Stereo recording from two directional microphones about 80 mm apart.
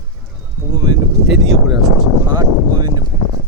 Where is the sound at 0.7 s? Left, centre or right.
Right.